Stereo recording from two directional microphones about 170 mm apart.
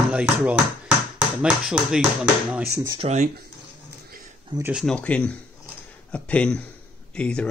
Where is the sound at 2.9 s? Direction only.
35° right (ahead or behind).